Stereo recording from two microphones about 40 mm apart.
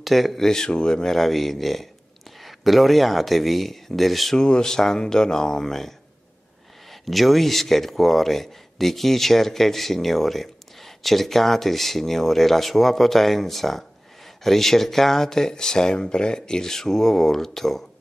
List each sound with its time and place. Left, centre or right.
0.0 s speech: centre
0.5 s speech: centre
1.1 s speech: centre
4.4 s speech: centre